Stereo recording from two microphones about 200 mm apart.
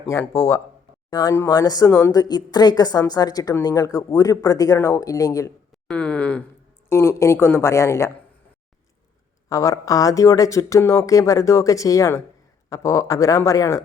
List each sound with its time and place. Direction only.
0.1 s a woman's voice: 15° left (ahead or behind)
9.5 s a woman's voice: 15° left (ahead or behind)